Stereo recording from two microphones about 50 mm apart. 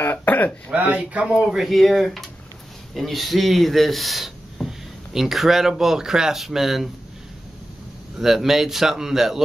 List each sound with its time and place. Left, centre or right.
0.0 s throat clearing: left
0.7 s speech: right
1.3 s speech: centre
8.2 s a man's voice: centre